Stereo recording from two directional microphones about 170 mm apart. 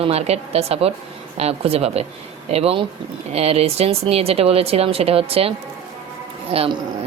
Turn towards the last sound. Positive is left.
turn(degrees=-35)  # may be behind; listen again after turning